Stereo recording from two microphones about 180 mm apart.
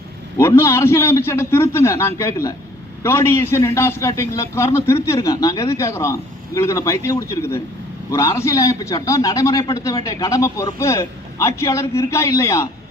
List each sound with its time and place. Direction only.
0.3 s a man's voice: 15° left (ahead or behind)